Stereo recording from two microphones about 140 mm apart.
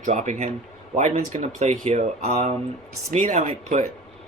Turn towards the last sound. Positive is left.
turn(degrees=-50)  # may be behind; listen again after turning